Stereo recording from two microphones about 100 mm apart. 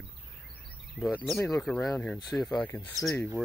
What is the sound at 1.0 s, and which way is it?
Speech, 15° right (ahead or behind).